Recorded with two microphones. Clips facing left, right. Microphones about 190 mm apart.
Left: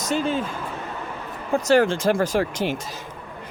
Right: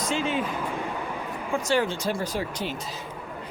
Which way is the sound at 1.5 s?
40° left (ahead or behind).